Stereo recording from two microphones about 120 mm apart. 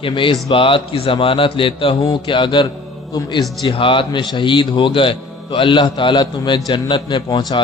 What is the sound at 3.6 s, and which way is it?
A man's voice, 45° left (ahead or behind).